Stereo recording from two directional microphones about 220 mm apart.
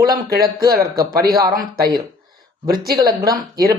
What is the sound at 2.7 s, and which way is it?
Speech, 15° right (ahead or behind).